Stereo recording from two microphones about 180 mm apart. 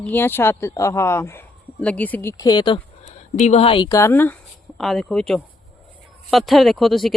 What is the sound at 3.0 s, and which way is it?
Speech, 40° left (ahead or behind).